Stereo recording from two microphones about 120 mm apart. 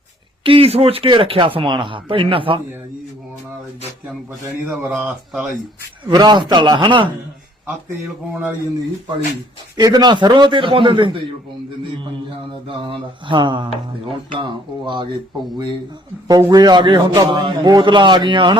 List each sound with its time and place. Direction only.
0.4 s a man's voice: 50° right (ahead or behind)
4.9 s speech: 15° right (ahead or behind)
6.1 s a man's voice: 40° right (ahead or behind)
9.7 s a man's voice: 35° right (ahead or behind)
12.6 s a man's voice: 45° right (ahead or behind)
16.5 s a man's voice: 35° right (ahead or behind)